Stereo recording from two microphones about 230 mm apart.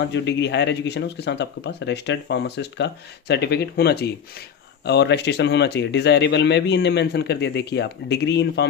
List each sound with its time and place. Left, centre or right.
0.0 s speech: left